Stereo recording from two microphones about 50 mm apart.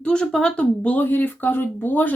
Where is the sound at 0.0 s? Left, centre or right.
Centre.